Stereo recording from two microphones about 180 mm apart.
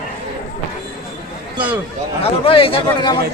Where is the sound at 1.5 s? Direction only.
10° right (ahead or behind).